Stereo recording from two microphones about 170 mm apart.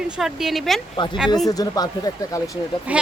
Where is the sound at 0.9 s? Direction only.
30° left (ahead or behind).